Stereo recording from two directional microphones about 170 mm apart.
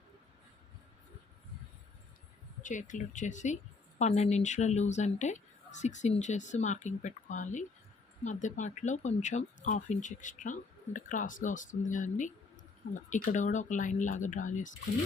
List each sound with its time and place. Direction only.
2.6 s a woman's voice: 50° left (ahead or behind)